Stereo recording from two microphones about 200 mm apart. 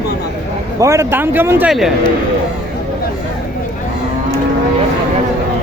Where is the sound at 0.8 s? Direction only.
15° right (ahead or behind).